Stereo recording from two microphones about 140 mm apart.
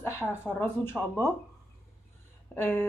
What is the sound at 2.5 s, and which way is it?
Speech, 10° left (ahead or behind).